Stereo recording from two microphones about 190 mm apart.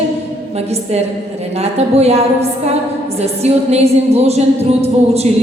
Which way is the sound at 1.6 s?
35° right (ahead or behind).